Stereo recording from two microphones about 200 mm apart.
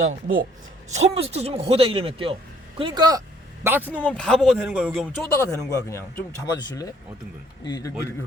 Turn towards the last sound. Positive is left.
turn(degrees=20)  # may be behind; listen again after turning